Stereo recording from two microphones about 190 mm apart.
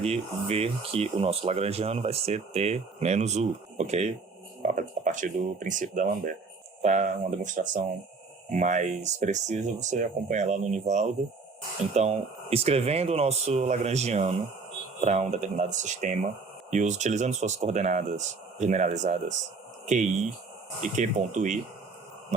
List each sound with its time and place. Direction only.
0.0 s speech: 35° right (ahead or behind)
20.9 s speech: 40° right (ahead or behind)